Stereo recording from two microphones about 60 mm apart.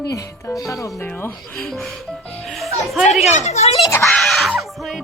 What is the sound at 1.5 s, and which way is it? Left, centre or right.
Speech, centre.